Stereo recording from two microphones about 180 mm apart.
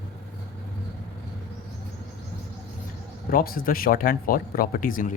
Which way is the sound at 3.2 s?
55° left (ahead or behind).